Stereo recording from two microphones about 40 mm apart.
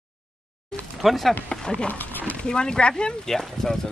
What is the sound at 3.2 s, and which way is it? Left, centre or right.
Speech, centre.